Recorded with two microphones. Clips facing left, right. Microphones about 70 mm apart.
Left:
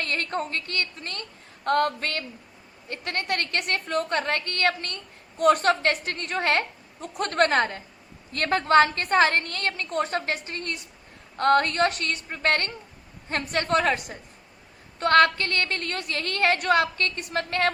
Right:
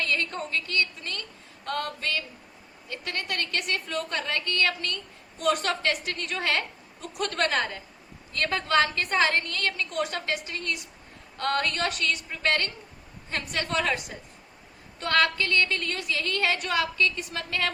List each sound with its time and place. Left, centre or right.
0.0 s a woman's voice: left